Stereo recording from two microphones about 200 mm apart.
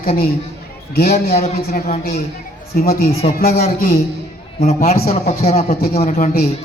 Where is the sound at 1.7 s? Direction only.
45° left (ahead or behind).